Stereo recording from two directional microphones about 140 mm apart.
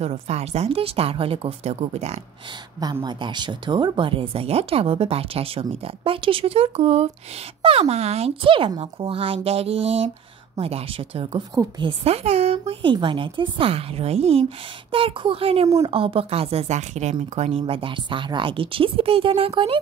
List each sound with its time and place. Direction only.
0.0 s speech: 50° right (ahead or behind)
2.8 s speech: 30° right (ahead or behind)